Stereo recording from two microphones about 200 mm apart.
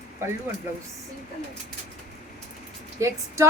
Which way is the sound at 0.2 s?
10° right (ahead or behind).